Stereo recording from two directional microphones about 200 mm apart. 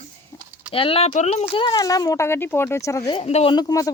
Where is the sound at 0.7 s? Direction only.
25° left (ahead or behind).